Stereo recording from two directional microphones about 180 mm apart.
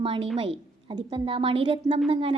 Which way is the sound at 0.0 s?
30° right (ahead or behind).